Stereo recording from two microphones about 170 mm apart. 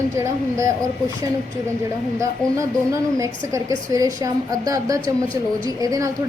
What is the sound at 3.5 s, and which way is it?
A woman's voice, 20° right (ahead or behind).